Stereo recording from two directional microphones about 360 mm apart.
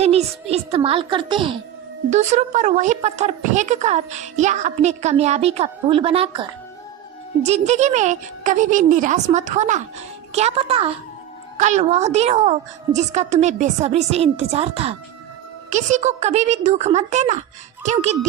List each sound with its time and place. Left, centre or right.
0.0 s a child's voice: centre